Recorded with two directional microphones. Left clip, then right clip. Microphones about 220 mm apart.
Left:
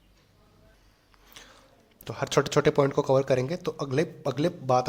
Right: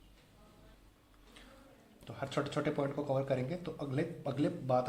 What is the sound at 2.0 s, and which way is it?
Speech, 40° left (ahead or behind).